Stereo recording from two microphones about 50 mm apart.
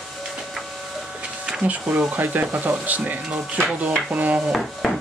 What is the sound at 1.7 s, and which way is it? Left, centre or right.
Speech, right.